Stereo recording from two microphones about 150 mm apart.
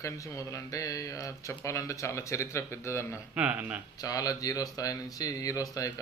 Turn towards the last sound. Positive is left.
turn(degrees=20)  # may be behind; listen again after turning